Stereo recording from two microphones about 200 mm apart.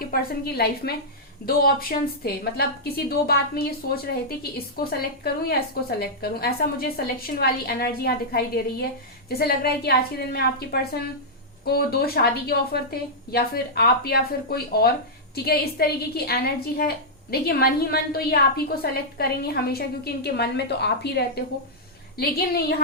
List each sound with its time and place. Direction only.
0.1 s a woman's voice: 50° left (ahead or behind)